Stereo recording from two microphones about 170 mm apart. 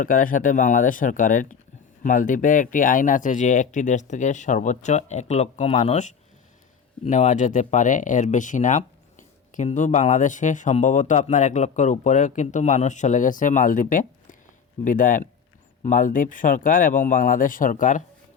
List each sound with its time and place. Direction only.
0.0 s speech: 55° left (ahead or behind)